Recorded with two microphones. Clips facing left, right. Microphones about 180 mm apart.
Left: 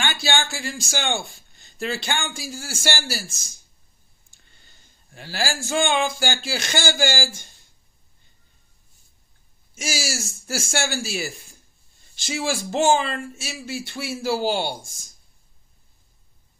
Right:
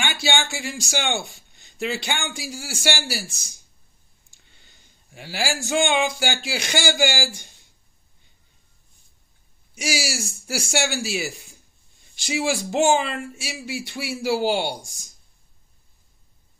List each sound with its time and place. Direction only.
0.0 s speech: 15° right (ahead or behind)
4.6 s speech: 20° right (ahead or behind)
9.8 s a man's voice: 15° right (ahead or behind)